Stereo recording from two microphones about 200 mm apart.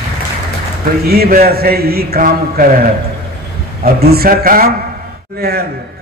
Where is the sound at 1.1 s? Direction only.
50° right (ahead or behind).